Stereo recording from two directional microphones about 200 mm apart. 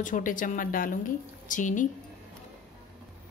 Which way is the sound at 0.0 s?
40° left (ahead or behind).